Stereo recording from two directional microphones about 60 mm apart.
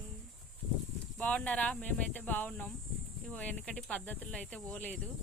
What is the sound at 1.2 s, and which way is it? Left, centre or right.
Speech, left.